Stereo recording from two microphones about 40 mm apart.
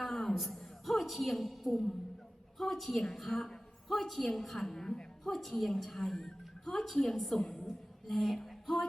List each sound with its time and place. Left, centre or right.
0.1 s a sound: centre
0.6 s a woman's voice: centre
5.3 s a woman's voice: centre
8.0 s speech: centre